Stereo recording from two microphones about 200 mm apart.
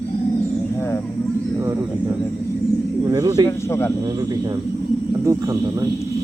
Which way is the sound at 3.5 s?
10° left (ahead or behind).